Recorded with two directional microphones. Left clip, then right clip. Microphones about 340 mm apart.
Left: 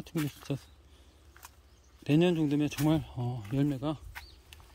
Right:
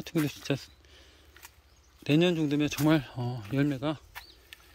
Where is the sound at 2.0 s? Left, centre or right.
Centre.